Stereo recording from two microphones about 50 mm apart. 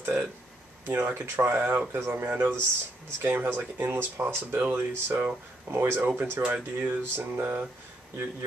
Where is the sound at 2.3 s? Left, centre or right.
Right.